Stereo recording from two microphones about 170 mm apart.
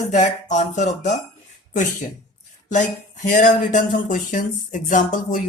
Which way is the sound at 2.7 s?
45° left (ahead or behind).